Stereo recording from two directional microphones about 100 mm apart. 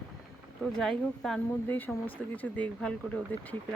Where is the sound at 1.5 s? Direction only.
20° left (ahead or behind).